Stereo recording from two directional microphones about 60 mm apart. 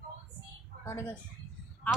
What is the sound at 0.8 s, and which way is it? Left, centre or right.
Speech, left.